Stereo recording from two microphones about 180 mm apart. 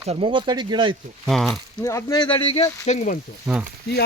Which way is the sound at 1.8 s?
20° left (ahead or behind).